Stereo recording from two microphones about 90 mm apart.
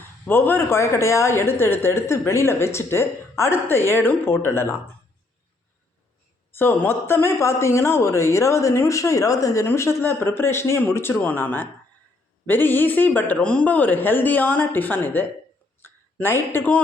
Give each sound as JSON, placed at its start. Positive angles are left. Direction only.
{"t": 0.3, "sound": "a woman's voice", "side_deg": 25}
{"t": 6.5, "sound": "a woman's voice", "side_deg": 25}
{"t": 15.8, "sound": "a sound", "side_deg": 25}